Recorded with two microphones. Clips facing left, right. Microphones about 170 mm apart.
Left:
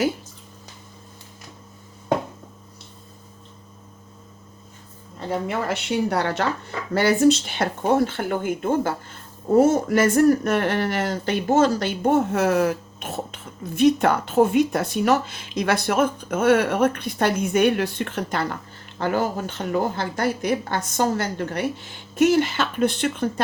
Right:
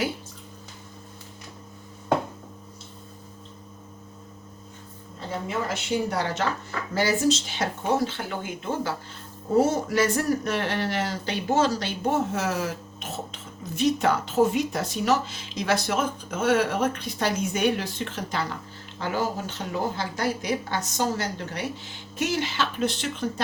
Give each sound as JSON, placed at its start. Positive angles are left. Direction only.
{"t": 5.5, "sound": "a woman's voice", "side_deg": 65}